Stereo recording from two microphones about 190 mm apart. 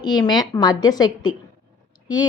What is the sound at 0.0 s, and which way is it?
A woman's voice, 20° left (ahead or behind).